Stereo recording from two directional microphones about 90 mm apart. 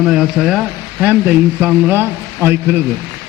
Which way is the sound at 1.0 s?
20° right (ahead or behind).